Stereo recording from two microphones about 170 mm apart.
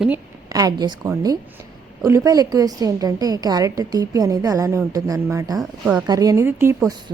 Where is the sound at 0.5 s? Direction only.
20° right (ahead or behind).